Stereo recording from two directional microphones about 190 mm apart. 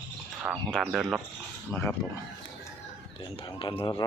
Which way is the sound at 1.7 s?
10° left (ahead or behind).